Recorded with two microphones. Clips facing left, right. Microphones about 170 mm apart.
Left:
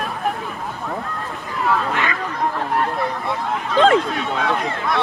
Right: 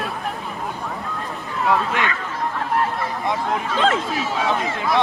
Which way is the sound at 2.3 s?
Centre (ahead or behind).